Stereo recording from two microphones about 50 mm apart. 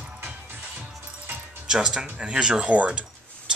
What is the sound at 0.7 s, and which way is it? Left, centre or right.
Music, right.